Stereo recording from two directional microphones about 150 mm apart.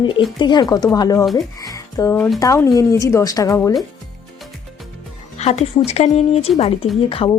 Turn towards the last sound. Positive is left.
turn(degrees=35)  # may be behind; listen again after turning